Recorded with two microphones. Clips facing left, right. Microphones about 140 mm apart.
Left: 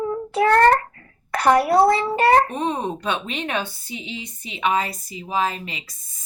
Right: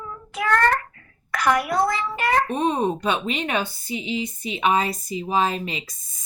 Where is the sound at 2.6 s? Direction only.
10° right (ahead or behind).